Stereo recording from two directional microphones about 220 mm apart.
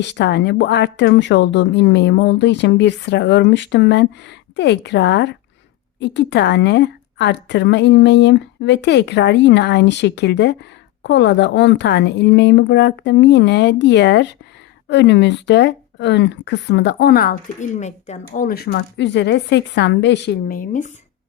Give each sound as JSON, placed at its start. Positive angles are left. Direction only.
{"t": 0.0, "sound": "speech", "side_deg": 50}